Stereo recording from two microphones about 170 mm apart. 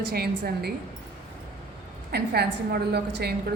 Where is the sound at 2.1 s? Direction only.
70° right (ahead or behind).